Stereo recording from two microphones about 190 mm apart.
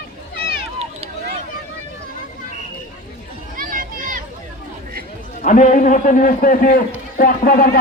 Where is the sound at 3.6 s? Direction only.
45° right (ahead or behind).